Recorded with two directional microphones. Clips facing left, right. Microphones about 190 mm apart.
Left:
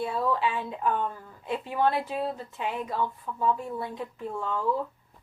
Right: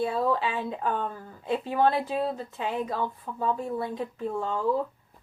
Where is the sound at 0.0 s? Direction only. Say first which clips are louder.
Right 1 dB; 35° right (ahead or behind).